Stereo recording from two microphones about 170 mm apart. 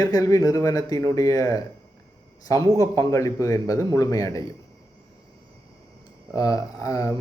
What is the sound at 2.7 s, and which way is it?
A man's voice, 20° left (ahead or behind).